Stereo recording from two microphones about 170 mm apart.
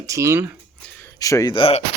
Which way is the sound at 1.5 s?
35° left (ahead or behind).